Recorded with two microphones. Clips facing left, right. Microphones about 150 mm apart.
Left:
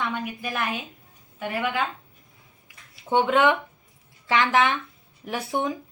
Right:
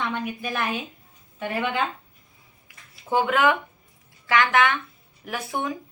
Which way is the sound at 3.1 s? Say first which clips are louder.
Left 1 dB; 25° left (ahead or behind).